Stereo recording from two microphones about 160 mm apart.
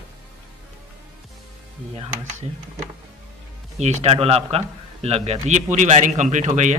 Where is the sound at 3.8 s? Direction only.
45° right (ahead or behind).